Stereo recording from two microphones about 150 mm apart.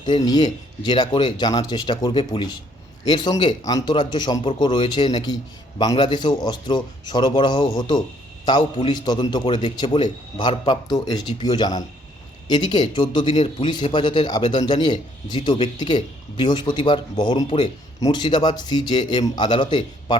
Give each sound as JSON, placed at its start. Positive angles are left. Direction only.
{"t": 0.0, "sound": "a man's voice", "side_deg": 30}